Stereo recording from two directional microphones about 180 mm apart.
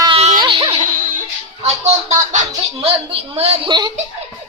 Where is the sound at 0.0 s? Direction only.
30° right (ahead or behind).